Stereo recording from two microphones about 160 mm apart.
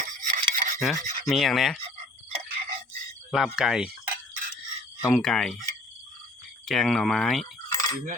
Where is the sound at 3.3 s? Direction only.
Centre (ahead or behind).